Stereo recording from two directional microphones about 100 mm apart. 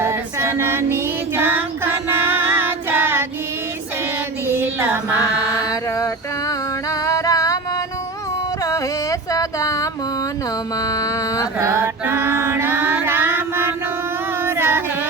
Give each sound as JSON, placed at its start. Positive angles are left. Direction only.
{"t": 0.0, "sound": "female singing", "side_deg": -25}
{"t": 4.5, "sound": "a sound", "side_deg": -25}
{"t": 5.2, "sound": "mantra", "side_deg": 35}
{"t": 7.0, "sound": "music", "side_deg": 35}
{"t": 8.6, "sound": "music", "side_deg": 35}
{"t": 10.8, "sound": "mantra", "side_deg": 35}
{"t": 11.6, "sound": "music", "side_deg": -25}
{"t": 14.4, "sound": "singing", "side_deg": -25}